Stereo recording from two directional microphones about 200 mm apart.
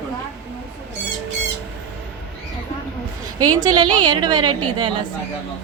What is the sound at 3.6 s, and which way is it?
Speech, 20° right (ahead or behind).